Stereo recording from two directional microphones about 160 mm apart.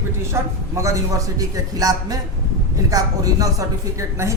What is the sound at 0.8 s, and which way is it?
A man's voice, 20° right (ahead or behind).